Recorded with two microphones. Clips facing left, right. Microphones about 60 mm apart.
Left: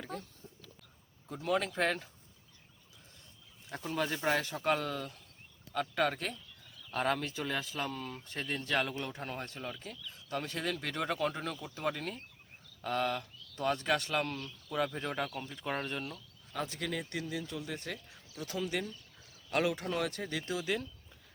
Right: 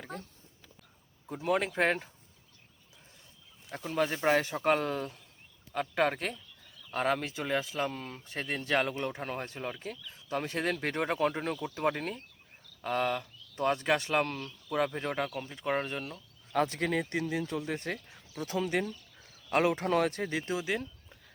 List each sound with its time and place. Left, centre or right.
1.3 s speech: right
3.7 s speech: centre
3.9 s speech: centre
4.2 s speech: right
6.9 s speech: centre
10.6 s speech: right
12.8 s speech: centre
13.7 s speech: right
16.5 s speech: right